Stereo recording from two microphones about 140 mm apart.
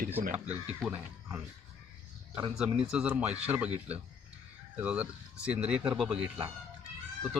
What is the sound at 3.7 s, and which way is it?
Speech, 50° right (ahead or behind).